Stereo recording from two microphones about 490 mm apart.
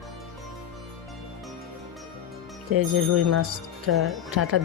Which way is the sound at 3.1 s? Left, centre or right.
Right.